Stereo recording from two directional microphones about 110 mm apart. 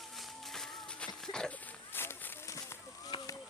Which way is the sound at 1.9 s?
20° left (ahead or behind).